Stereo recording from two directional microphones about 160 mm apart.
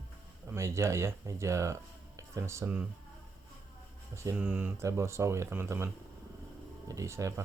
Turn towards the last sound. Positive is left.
turn(degrees=-20)  # may be behind; listen again after turning